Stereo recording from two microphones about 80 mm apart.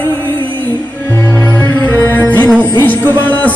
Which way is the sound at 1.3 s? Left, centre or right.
Left.